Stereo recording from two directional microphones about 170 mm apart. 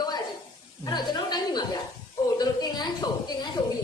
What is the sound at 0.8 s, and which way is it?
Speech, 25° left (ahead or behind).